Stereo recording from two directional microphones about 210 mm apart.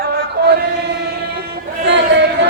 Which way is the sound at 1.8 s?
55° right (ahead or behind).